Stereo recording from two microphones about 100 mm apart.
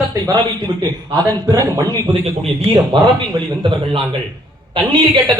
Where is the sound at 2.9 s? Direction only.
60° right (ahead or behind).